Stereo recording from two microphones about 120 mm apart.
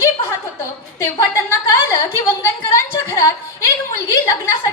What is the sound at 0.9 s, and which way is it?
A woman's voice, 25° left (ahead or behind).